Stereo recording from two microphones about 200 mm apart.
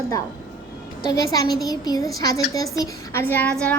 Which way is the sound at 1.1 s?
20° left (ahead or behind).